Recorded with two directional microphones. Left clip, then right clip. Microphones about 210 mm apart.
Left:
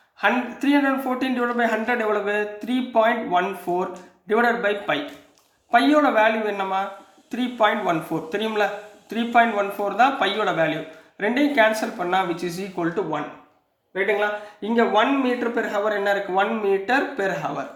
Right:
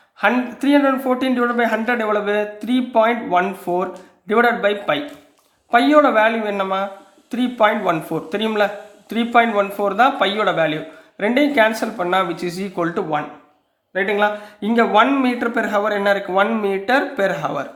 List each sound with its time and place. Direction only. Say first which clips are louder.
0.2 s speech: right 3 dB; 30° right (ahead or behind)